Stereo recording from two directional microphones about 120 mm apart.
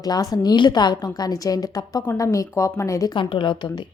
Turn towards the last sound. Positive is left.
turn(degrees=45)  # may be behind; listen again after turning